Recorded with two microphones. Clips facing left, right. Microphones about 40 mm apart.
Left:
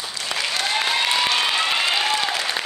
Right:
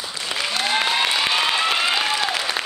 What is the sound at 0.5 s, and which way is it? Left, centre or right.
Applause, centre.